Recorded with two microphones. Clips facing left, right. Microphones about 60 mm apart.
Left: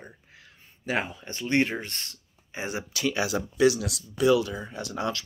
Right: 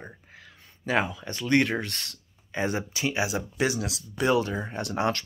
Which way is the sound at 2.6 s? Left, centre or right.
Right.